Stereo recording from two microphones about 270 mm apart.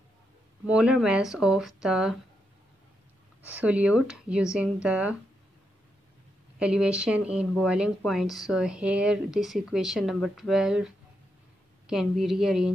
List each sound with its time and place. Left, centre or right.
0.7 s speech: centre
3.4 s speech: centre
6.6 s speech: centre
11.9 s speech: centre